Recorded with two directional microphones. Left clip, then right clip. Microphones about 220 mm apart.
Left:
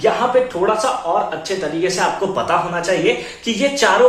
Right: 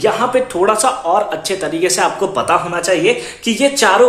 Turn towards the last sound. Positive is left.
turn(degrees=-50)  # may be behind; listen again after turning